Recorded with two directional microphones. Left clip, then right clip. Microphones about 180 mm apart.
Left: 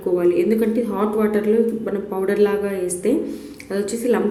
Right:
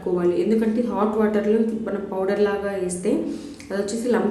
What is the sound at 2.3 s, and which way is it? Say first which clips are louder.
A woman's voice: left 4 dB; 15° left (ahead or behind).